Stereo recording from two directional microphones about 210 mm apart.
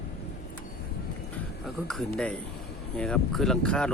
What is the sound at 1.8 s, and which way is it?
Speech, 5° left (ahead or behind).